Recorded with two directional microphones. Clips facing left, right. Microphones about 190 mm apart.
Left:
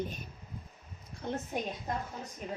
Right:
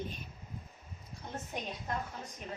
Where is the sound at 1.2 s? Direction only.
65° left (ahead or behind).